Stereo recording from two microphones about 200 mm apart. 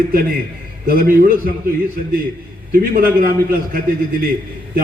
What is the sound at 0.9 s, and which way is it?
Speech, 45° right (ahead or behind).